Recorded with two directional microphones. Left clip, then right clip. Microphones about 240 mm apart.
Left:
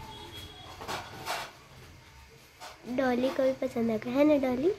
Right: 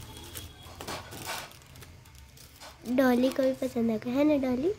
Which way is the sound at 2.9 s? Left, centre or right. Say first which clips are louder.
Right 3 dB; right.